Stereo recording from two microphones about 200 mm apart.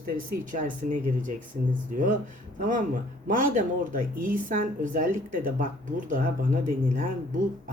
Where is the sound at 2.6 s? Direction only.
40° right (ahead or behind).